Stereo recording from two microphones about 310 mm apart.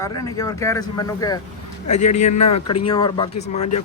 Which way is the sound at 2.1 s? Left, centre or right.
Left.